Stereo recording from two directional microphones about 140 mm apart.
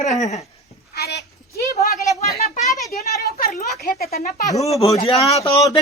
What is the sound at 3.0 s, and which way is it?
A woman's voice, 90° left.